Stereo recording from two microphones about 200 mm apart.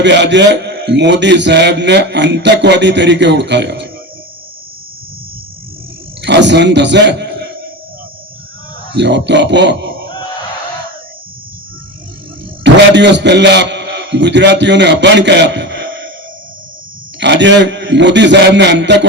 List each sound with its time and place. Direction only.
0.0 s a man's voice: 60° right (ahead or behind)
6.2 s a man's voice: 60° right (ahead or behind)
9.0 s a man's voice: 60° right (ahead or behind)
12.6 s a man's voice: 60° right (ahead or behind)
17.2 s a man's voice: 60° right (ahead or behind)